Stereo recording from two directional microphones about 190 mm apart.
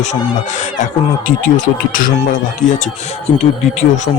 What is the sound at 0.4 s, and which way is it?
Speech, 40° left (ahead or behind).